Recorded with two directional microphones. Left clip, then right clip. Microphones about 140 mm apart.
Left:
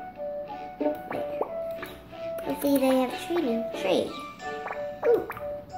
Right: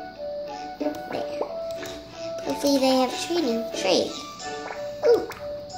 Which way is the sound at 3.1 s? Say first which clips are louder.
Right 3 dB; 40° right (ahead or behind).